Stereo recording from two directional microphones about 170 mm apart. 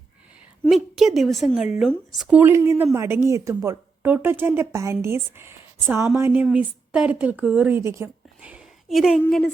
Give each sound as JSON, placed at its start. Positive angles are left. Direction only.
{"t": 0.7, "sound": "a woman's voice", "side_deg": 0}
{"t": 2.4, "sound": "speech", "side_deg": -15}
{"t": 9.2, "sound": "a woman's voice", "side_deg": 10}